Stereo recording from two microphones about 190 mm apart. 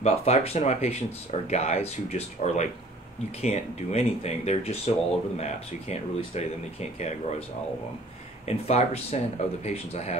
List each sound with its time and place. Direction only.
0.0 s speech: 35° left (ahead or behind)
8.5 s speech: 35° left (ahead or behind)